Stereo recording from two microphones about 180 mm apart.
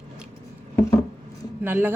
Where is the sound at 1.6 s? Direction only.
10° right (ahead or behind).